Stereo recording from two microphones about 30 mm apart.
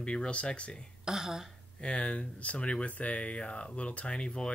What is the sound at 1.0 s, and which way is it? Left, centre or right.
Speech, centre.